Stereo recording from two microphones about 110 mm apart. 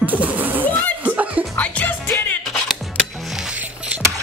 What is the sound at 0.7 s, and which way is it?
Chuckle, 10° left (ahead or behind).